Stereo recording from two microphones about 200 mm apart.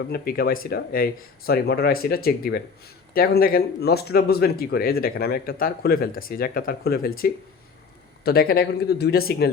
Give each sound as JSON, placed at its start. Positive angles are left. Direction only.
{"t": 0.1, "sound": "speech", "side_deg": 50}
{"t": 8.2, "sound": "speech", "side_deg": 50}